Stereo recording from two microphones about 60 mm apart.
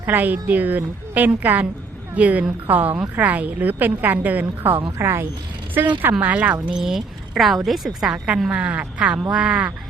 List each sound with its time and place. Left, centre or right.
0.0 s a woman's voice: right
4.9 s speech: right
5.7 s a woman's voice: right
6.7 s speech: centre
8.0 s a woman's voice: centre